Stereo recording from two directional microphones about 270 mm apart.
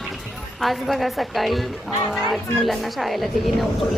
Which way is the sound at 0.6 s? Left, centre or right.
Centre.